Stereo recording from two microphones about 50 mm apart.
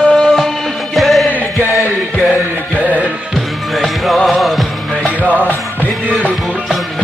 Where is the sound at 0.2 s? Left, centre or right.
Centre.